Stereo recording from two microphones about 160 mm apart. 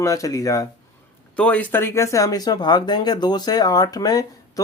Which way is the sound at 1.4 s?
10° left (ahead or behind).